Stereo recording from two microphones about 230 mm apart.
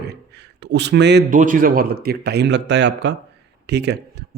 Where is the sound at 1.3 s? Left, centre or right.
Right.